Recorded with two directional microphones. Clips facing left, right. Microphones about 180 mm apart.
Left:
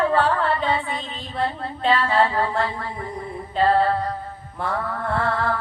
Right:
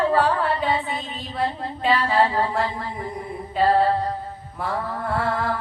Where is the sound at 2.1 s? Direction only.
20° right (ahead or behind).